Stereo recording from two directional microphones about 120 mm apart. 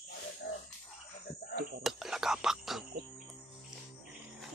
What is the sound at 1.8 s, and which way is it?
Whispering, 5° right (ahead or behind).